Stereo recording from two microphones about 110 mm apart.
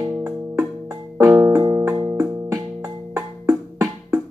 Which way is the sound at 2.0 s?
25° right (ahead or behind).